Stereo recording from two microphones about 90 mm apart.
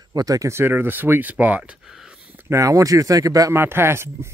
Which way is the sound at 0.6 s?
25° right (ahead or behind).